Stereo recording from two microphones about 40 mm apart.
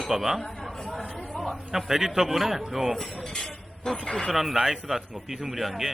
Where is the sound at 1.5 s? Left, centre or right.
Centre.